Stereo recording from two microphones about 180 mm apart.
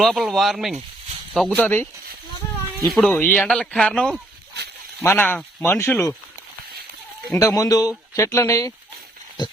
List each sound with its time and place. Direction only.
0.0 s speech: centre (ahead or behind)
2.9 s speech: 5° left (ahead or behind)
7.3 s speech: 20° left (ahead or behind)